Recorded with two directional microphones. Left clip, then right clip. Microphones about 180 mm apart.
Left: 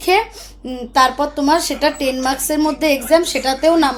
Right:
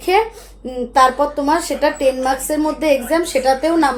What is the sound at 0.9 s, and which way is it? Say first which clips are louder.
Speech: right 1 dB; 15° left (ahead or behind).